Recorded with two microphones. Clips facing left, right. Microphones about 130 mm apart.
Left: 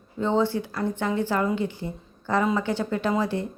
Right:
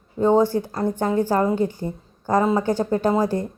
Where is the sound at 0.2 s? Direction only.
40° right (ahead or behind).